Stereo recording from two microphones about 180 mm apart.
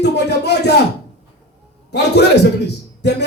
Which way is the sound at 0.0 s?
65° left (ahead or behind).